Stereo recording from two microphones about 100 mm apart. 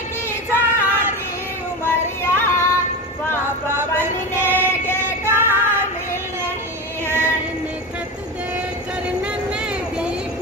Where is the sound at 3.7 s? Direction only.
25° right (ahead or behind).